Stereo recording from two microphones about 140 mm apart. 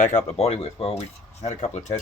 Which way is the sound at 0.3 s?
45° left (ahead or behind).